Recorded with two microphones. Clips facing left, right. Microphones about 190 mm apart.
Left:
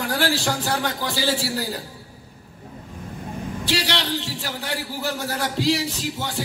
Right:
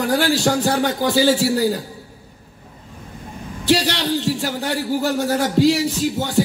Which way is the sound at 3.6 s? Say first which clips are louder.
Right 8 dB; 50° right (ahead or behind).